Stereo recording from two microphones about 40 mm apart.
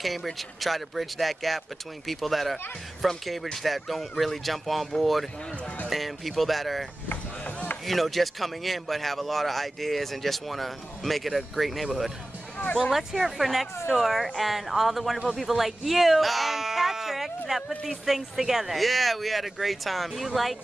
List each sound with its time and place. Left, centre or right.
0.0 s speech: centre
7.1 s a sound: left
7.8 s speech: centre